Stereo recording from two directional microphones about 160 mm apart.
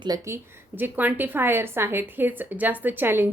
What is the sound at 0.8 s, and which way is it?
Speech, 10° right (ahead or behind).